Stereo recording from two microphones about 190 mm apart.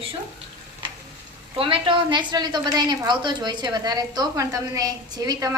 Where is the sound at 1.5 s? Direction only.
25° right (ahead or behind).